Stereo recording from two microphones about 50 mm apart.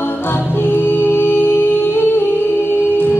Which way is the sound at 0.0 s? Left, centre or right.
Left.